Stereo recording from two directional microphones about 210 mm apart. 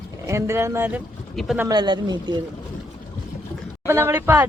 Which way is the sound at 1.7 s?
20° right (ahead or behind).